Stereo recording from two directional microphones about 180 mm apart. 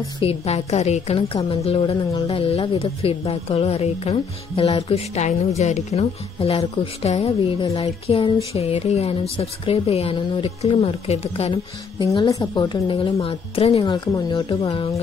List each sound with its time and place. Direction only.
0.2 s a woman's voice: 35° left (ahead or behind)
12.3 s speech: 20° left (ahead or behind)